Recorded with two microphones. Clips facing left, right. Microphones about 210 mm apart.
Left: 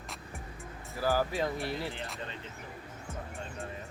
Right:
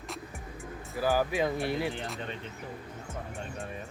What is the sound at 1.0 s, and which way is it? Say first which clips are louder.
Speech: right 2 dB; 15° right (ahead or behind).